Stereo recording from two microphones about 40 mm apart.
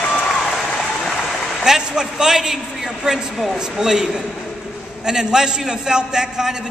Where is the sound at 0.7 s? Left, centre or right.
Centre.